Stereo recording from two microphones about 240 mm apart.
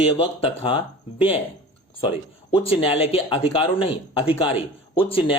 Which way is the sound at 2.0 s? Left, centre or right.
Left.